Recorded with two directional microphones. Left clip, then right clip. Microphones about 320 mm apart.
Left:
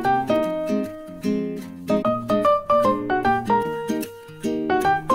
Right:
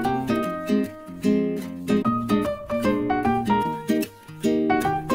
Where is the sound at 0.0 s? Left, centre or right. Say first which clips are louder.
Left 5 dB; centre.